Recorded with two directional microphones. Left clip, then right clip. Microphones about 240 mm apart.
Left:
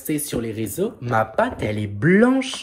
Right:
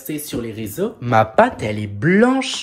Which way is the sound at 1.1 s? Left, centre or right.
Right.